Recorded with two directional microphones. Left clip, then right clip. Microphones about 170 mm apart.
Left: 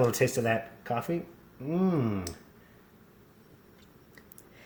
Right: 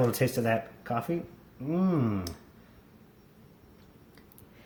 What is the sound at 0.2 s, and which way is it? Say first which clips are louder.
Speech: left 1 dB; 30° left (ahead or behind).